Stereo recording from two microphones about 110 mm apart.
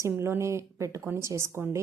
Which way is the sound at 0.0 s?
25° right (ahead or behind).